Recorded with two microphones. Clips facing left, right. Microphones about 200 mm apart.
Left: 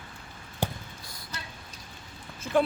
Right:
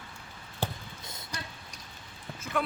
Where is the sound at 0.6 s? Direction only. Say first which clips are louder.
Left 3 dB; 15° left (ahead or behind).